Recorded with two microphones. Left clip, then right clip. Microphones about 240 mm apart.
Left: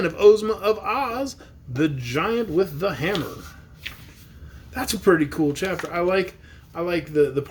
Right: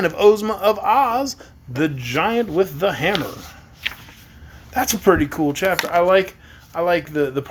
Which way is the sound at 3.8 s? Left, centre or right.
Right.